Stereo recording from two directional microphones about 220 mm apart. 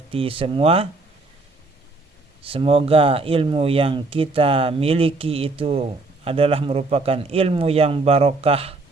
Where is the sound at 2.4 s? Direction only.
25° right (ahead or behind).